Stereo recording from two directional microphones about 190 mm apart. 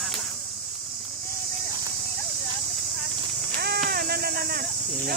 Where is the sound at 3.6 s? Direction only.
55° right (ahead or behind).